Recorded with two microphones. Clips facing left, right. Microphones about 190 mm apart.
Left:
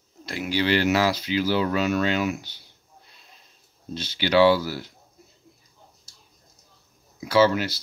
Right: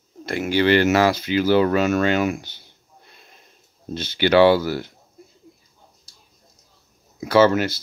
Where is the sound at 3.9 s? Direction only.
55° right (ahead or behind).